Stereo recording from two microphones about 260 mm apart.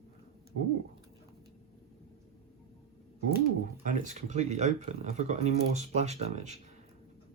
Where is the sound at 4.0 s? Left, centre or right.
Right.